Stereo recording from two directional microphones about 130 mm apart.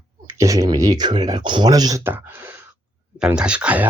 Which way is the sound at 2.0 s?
15° right (ahead or behind).